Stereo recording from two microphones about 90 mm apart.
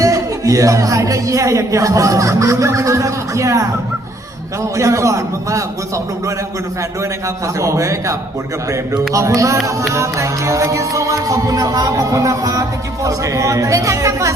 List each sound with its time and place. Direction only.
0.0 s a man's voice: 40° right (ahead or behind)
4.8 s a man's voice: 35° right (ahead or behind)
7.4 s a man's voice: 35° right (ahead or behind)